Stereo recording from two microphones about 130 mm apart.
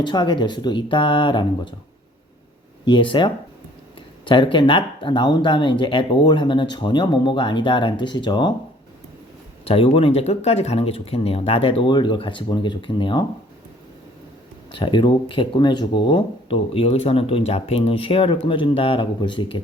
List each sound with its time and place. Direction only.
0.0 s speech: 35° left (ahead or behind)
2.8 s speech: 40° left (ahead or behind)
9.6 s speech: 45° left (ahead or behind)
14.7 s speech: 40° left (ahead or behind)